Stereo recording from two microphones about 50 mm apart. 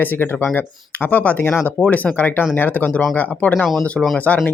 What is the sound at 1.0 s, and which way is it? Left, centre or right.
Speech, left.